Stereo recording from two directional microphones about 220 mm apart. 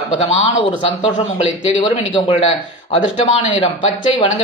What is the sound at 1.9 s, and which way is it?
A man's voice, 25° left (ahead or behind).